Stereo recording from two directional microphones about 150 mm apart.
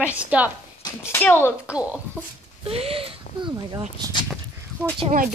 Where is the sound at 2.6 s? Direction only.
40° right (ahead or behind).